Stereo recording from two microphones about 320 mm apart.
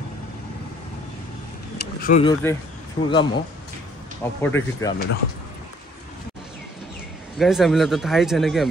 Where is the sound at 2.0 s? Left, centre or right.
Left.